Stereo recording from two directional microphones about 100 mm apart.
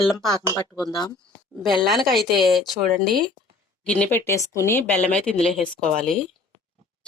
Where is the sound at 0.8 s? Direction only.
40° left (ahead or behind).